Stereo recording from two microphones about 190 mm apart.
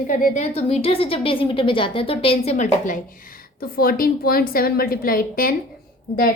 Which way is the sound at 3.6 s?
50° left (ahead or behind).